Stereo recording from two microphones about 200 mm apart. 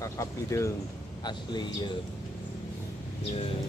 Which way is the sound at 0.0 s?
15° left (ahead or behind).